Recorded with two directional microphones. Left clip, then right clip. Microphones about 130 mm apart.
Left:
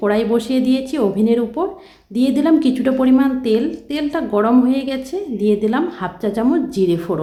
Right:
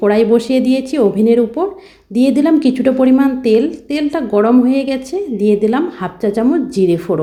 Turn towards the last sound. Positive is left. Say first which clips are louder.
# right 4 dB
turn(degrees=-20)  # may be behind; listen again after turning